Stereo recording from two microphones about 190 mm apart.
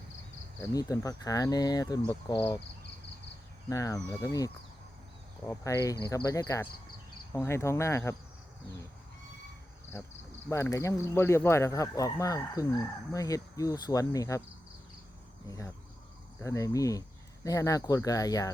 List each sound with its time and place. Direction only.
0.6 s speech: 20° left (ahead or behind)
3.7 s speech: 15° left (ahead or behind)
9.9 s speech: 10° left (ahead or behind)
15.4 s speech: 15° left (ahead or behind)